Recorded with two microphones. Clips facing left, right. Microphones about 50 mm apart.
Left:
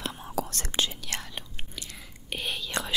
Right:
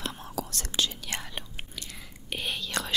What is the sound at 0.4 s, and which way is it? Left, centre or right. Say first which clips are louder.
Whispering: left 2 dB; left.